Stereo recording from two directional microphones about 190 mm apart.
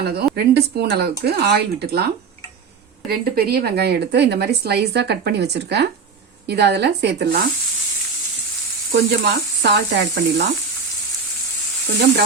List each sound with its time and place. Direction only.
0.0 s speech: 60° right (ahead or behind)
3.1 s speech: 55° right (ahead or behind)
8.9 s speech: 60° right (ahead or behind)